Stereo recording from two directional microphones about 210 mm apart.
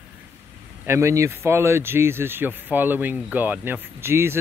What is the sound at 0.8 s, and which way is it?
Speech, 15° right (ahead or behind).